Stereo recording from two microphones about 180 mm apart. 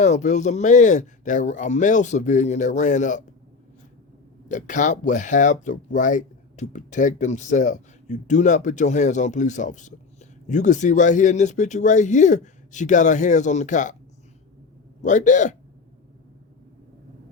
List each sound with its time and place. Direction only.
0.0 s speech: 40° left (ahead or behind)
4.4 s speech: 45° left (ahead or behind)
15.0 s speech: 45° left (ahead or behind)